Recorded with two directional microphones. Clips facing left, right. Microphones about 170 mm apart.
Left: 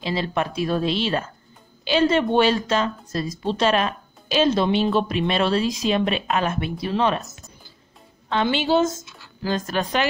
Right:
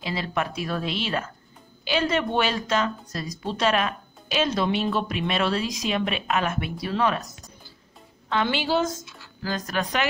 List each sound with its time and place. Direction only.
0.0 s a woman's voice: 30° left (ahead or behind)